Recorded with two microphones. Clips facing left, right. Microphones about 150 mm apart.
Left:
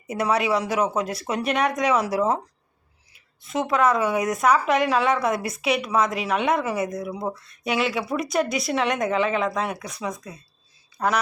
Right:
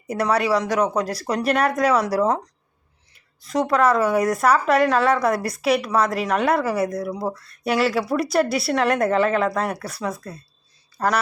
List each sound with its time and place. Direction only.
0.1 s a woman's voice: 5° left (ahead or behind)
3.4 s a woman's voice: centre (ahead or behind)
6.7 s speech: 20° left (ahead or behind)
7.0 s a woman's voice: centre (ahead or behind)